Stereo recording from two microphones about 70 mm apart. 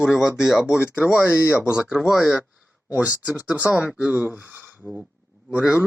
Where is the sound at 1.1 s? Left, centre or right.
Left.